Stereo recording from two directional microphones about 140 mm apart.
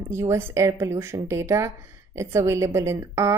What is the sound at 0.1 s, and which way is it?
A woman's voice, 20° right (ahead or behind).